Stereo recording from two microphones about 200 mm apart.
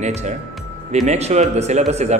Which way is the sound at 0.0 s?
35° right (ahead or behind).